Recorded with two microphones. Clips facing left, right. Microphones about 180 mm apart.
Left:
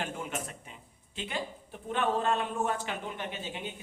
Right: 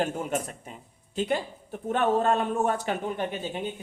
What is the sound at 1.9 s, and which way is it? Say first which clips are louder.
A man's voice: right 5 dB; 45° right (ahead or behind).